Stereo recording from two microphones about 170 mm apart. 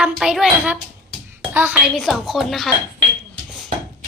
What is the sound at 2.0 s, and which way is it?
Speech, centre (ahead or behind).